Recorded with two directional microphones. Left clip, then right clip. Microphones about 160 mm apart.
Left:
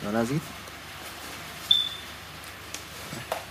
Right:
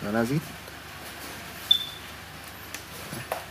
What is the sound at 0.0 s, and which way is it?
Speech, 15° right (ahead or behind).